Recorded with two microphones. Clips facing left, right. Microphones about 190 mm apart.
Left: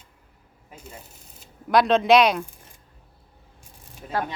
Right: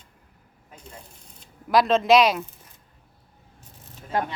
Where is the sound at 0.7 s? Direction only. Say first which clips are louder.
Left 2 dB; 5° left (ahead or behind).